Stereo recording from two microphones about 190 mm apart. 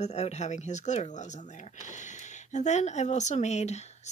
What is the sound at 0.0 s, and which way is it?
Speech, 35° left (ahead or behind).